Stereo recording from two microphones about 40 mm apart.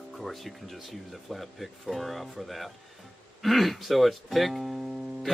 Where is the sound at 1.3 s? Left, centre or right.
Centre.